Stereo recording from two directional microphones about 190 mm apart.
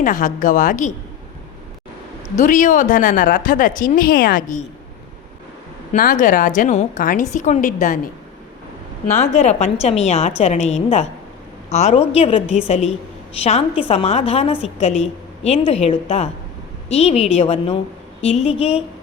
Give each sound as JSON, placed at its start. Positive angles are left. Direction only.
{"t": 0.0, "sound": "speech", "side_deg": 45}
{"t": 2.3, "sound": "speech", "side_deg": 40}
{"t": 5.9, "sound": "a woman's voice", "side_deg": 45}
{"t": 9.1, "sound": "a woman's voice", "side_deg": 35}
{"t": 18.2, "sound": "a sound", "side_deg": 35}